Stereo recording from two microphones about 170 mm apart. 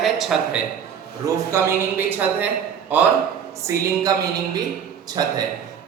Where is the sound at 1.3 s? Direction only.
15° right (ahead or behind).